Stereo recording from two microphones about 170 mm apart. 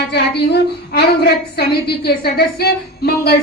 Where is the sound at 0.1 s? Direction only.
75° left (ahead or behind).